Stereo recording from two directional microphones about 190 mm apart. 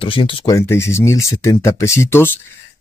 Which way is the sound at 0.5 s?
15° left (ahead or behind).